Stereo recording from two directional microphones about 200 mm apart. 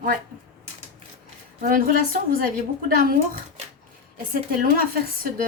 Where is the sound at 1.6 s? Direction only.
45° right (ahead or behind).